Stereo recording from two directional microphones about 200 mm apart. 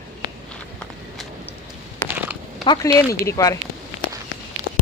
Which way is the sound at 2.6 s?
20° left (ahead or behind).